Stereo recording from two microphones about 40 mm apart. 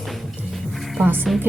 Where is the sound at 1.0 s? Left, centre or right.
Right.